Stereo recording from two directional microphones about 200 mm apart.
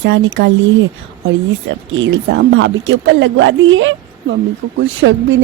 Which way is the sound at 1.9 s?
70° right (ahead or behind).